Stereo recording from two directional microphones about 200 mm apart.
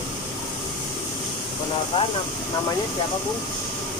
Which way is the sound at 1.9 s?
20° left (ahead or behind).